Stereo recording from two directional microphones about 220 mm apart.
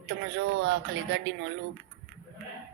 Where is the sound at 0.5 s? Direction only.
55° right (ahead or behind).